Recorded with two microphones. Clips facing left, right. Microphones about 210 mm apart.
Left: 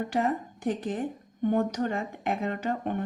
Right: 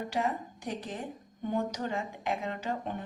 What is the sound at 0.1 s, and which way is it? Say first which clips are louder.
A woman's voice: left 4 dB; 55° left (ahead or behind).